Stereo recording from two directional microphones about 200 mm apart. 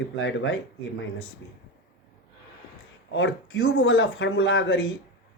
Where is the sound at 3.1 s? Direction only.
70° left (ahead or behind).